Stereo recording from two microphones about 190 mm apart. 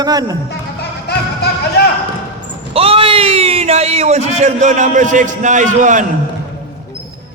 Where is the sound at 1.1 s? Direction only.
60° left (ahead or behind).